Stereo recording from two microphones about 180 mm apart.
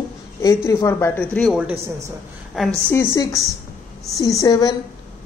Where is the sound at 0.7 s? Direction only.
15° left (ahead or behind); by 2.7 s centre (ahead or behind).